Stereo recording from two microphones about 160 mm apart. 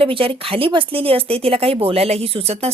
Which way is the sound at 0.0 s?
35° right (ahead or behind).